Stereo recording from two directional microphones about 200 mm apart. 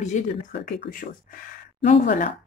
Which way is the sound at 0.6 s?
50° left (ahead or behind).